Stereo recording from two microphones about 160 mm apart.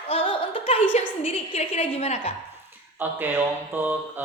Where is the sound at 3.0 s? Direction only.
10° right (ahead or behind).